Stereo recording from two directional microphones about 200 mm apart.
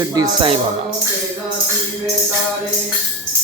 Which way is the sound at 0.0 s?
20° right (ahead or behind).